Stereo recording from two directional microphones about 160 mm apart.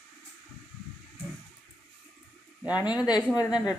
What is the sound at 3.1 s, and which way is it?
Speech, 25° left (ahead or behind).